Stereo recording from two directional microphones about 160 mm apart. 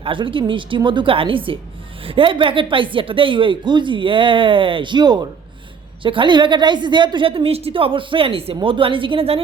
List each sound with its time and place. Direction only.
0.0 s a woman's voice: 30° right (ahead or behind)